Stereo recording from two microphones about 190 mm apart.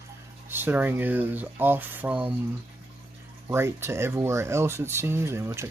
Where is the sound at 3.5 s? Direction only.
15° right (ahead or behind).